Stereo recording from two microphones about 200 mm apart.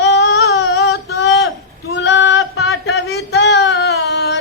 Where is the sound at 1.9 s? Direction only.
65° left (ahead or behind).